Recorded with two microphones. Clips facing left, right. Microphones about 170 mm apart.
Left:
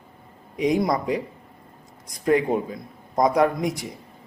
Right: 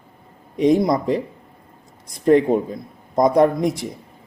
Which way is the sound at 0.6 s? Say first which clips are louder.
Right 5 dB; 30° right (ahead or behind).